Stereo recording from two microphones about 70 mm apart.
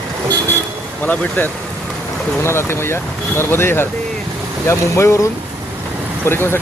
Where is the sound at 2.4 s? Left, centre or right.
Left.